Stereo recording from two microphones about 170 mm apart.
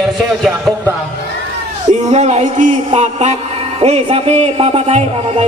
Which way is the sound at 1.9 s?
45° right (ahead or behind).